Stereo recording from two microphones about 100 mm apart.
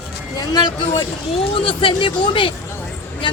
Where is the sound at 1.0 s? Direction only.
65° left (ahead or behind).